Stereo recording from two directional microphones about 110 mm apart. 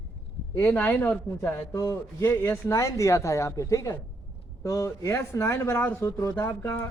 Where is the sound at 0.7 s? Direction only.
20° left (ahead or behind).